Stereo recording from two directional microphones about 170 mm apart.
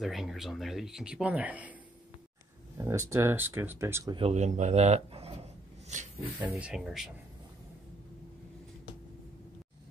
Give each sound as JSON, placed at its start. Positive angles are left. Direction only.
{"t": 0.0, "sound": "speech", "side_deg": 0}
{"t": 2.8, "sound": "speech", "side_deg": -15}
{"t": 4.1, "sound": "speech", "side_deg": -40}
{"t": 6.4, "sound": "speech", "side_deg": -10}